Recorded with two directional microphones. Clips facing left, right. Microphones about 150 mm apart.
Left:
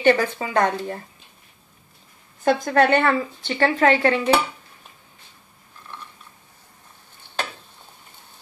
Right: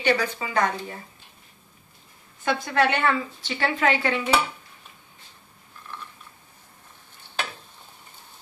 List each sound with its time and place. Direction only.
0.0 s a woman's voice: 45° left (ahead or behind)
2.4 s a woman's voice: 45° left (ahead or behind)